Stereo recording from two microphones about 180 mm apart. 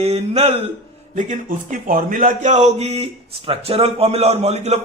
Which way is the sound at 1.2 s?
45° right (ahead or behind).